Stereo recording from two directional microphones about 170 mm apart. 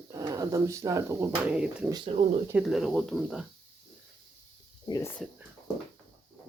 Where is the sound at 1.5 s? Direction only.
5° right (ahead or behind).